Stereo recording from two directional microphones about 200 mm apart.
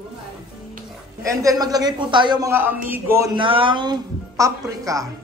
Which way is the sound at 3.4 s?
25° right (ahead or behind).